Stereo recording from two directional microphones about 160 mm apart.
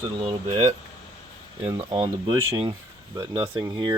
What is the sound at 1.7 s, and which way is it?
Speech, 30° right (ahead or behind).